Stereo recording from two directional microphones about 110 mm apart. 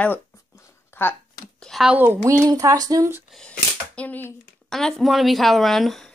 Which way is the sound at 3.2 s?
5° left (ahead or behind).